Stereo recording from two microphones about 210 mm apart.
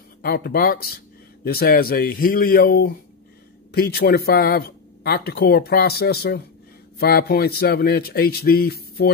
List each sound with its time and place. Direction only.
0.2 s speech: 50° left (ahead or behind)